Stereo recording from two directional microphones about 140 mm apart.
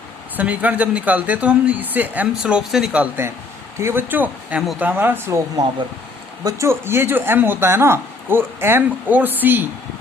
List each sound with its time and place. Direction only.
0.3 s speech: 10° right (ahead or behind)
6.4 s speech: 20° right (ahead or behind)